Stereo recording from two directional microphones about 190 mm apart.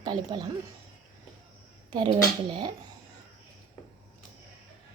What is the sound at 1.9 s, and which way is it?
Speech, 25° right (ahead or behind).